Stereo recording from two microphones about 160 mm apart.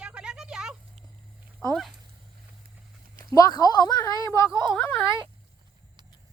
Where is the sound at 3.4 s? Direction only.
25° left (ahead or behind).